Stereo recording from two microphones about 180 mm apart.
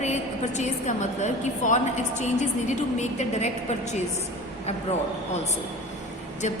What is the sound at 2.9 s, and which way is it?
Speech, 40° left (ahead or behind).